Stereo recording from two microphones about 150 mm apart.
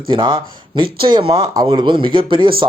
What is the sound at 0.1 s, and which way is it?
Speech, 30° right (ahead or behind).